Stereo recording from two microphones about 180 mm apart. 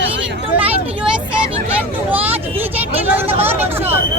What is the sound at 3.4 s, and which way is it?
Vehicle, 10° right (ahead or behind).